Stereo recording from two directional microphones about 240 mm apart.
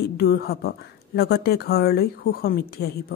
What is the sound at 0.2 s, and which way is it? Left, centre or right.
A woman's voice, left.